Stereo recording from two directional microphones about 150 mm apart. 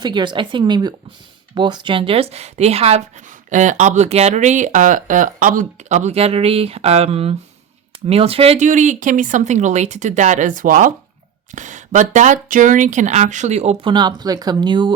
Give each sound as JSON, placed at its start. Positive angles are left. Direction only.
{"t": 0.0, "sound": "speech", "side_deg": -30}
{"t": 13.9, "sound": "speech", "side_deg": -30}